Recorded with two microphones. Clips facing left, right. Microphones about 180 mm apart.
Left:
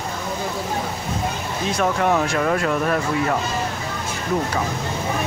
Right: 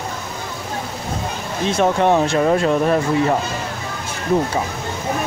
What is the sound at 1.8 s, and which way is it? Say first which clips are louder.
Speech: right 4 dB; 25° right (ahead or behind).